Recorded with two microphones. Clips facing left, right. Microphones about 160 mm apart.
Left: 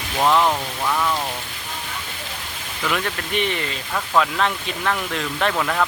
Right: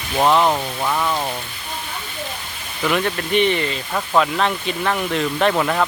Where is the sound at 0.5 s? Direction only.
15° right (ahead or behind).